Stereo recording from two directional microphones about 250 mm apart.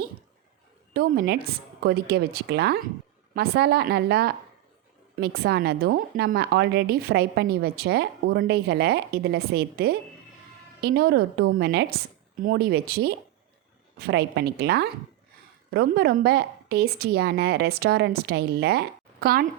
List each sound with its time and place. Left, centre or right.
0.9 s speech: right